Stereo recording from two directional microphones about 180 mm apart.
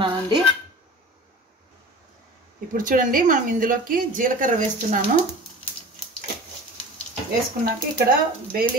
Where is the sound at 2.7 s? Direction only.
50° right (ahead or behind).